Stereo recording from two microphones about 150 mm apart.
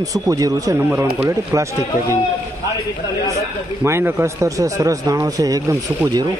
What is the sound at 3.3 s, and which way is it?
A man's voice, 20° right (ahead or behind).